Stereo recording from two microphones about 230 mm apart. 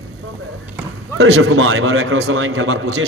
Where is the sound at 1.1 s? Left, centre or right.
Right.